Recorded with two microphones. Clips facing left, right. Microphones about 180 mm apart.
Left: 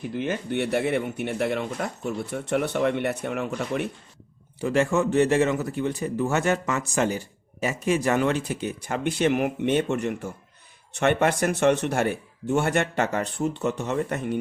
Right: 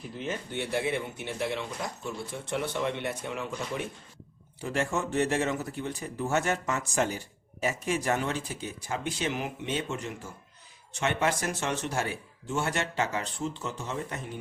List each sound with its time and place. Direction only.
0.1 s speech: 75° left (ahead or behind)
4.6 s speech: 75° left (ahead or behind)